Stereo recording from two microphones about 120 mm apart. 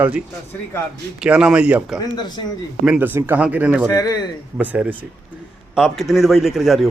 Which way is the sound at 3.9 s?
30° left (ahead or behind).